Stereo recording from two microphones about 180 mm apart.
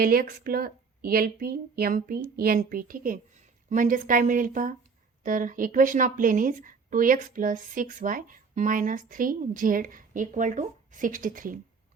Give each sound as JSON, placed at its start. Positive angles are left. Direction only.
{"t": 0.0, "sound": "speech", "side_deg": -55}